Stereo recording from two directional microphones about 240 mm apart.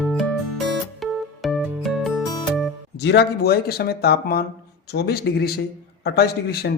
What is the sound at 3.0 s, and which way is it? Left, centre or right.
Speech, left.